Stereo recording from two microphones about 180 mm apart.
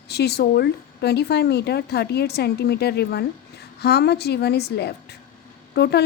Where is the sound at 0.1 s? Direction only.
65° left (ahead or behind).